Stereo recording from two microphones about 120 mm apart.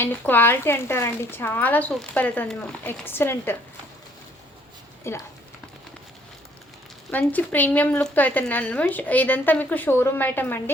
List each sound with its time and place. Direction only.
0.0 s speech: 15° left (ahead or behind)
5.1 s speech: 25° left (ahead or behind)
7.1 s speech: 15° left (ahead or behind)